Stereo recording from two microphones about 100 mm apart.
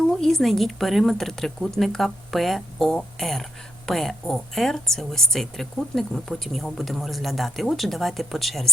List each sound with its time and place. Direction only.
0.2 s a woman's voice: 5° left (ahead or behind)